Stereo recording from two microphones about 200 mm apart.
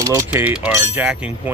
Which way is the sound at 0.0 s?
10° right (ahead or behind).